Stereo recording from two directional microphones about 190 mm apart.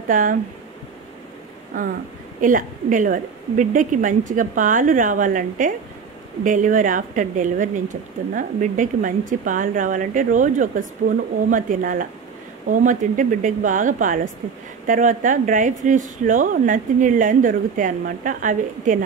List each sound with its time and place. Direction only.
0.1 s a woman's voice: 45° right (ahead or behind)
2.4 s a woman's voice: 45° right (ahead or behind)